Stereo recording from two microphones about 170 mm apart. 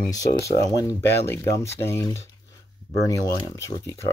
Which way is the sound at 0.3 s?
20° left (ahead or behind).